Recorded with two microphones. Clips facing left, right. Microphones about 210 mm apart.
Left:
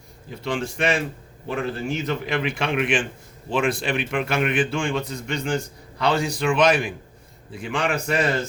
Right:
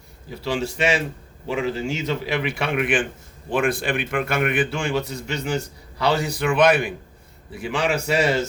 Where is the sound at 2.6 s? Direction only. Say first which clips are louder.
Even; 5° right (ahead or behind).